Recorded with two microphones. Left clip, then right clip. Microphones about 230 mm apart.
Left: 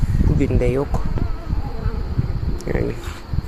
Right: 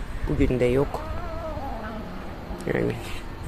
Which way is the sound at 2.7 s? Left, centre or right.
Centre.